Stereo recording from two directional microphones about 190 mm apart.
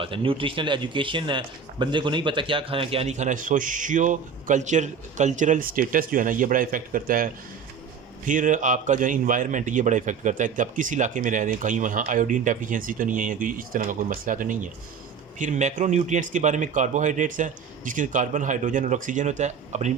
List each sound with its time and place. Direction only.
0.0 s a man's voice: 25° right (ahead or behind)